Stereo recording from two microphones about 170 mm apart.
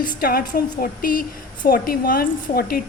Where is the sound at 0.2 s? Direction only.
60° left (ahead or behind).